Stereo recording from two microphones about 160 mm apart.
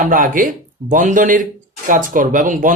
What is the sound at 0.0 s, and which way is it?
Speech, 60° right (ahead or behind).